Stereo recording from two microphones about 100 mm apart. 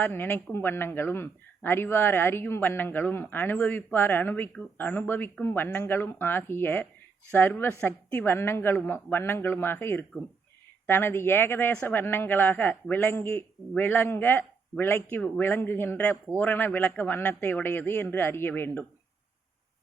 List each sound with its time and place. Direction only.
0.0 s speech: 20° left (ahead or behind)